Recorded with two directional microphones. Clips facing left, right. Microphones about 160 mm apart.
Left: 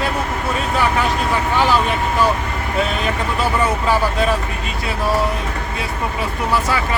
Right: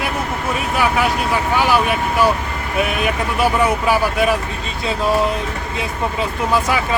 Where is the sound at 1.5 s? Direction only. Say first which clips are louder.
Right 1 dB; 10° right (ahead or behind).